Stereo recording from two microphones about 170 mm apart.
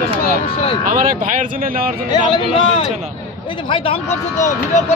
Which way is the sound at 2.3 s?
30° left (ahead or behind).